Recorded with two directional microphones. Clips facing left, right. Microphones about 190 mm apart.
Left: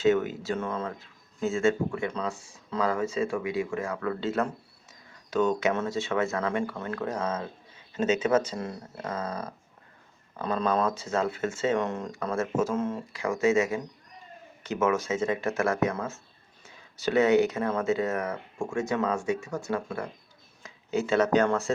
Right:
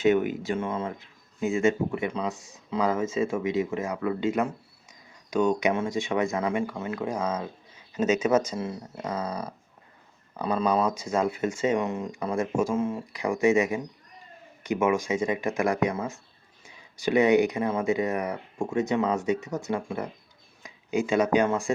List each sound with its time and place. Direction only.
0.0 s speech: 15° right (ahead or behind)
9.0 s speech: 15° right (ahead or behind)